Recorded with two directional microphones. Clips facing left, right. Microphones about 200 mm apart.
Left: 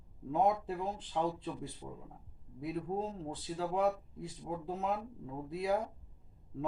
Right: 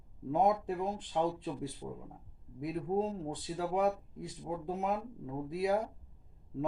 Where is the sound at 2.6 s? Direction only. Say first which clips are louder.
Right 4 dB; 15° right (ahead or behind).